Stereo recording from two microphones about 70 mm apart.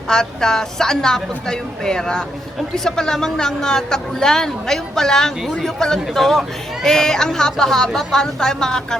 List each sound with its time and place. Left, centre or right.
0.1 s a woman's voice: centre